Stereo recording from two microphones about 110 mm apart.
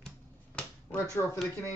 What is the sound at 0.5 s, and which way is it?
Finger snapping, 10° left (ahead or behind).